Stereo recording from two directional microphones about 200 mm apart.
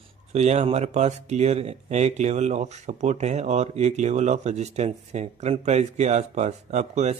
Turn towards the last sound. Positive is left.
turn(degrees=-35)  # may be behind; listen again after turning